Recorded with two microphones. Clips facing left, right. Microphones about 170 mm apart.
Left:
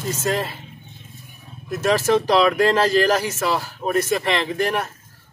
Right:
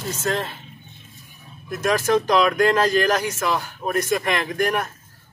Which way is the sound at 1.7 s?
5° left (ahead or behind).